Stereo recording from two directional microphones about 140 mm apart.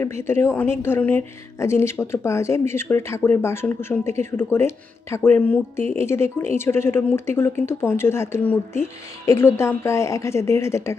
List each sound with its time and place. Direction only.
0.0 s a woman's voice: 20° left (ahead or behind)